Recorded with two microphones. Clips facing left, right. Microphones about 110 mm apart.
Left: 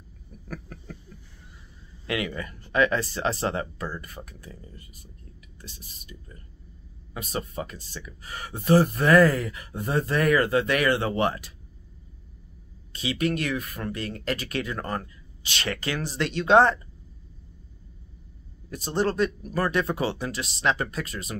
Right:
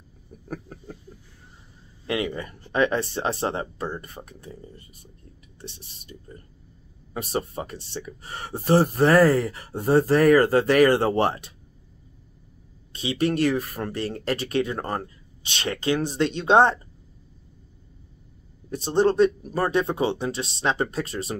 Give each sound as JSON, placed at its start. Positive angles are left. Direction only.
{"t": 0.5, "sound": "a sound", "side_deg": -25}
{"t": 2.0, "sound": "speech", "side_deg": -30}
{"t": 12.9, "sound": "speech", "side_deg": -30}
{"t": 18.7, "sound": "speech", "side_deg": -25}